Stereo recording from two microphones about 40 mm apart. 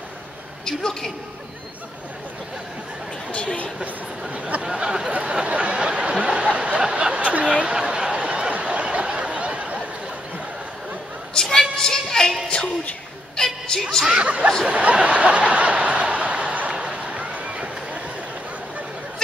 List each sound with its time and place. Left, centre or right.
0.7 s a woman's voice: centre
3.3 s speech: left
4.3 s speech: right
4.7 s a sound: right
11.7 s child singing: centre
12.4 s music: left
14.1 s speech: right
14.7 s snicker: right
16.7 s a sound: centre
17.0 s a sound: right